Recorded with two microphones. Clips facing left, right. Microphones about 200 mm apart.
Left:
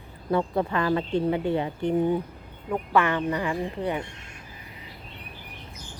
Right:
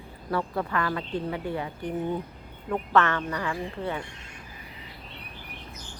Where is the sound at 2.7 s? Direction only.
10° left (ahead or behind).